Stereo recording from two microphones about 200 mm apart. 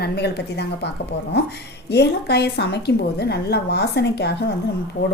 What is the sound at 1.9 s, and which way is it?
A woman's voice, 55° left (ahead or behind).